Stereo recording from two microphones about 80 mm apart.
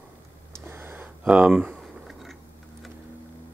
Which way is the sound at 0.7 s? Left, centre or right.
Right.